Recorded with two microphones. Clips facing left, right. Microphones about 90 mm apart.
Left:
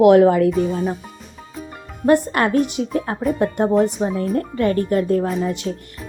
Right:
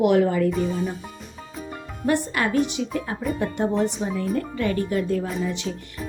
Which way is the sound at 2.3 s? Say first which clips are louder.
Left 4 dB; 45° left (ahead or behind).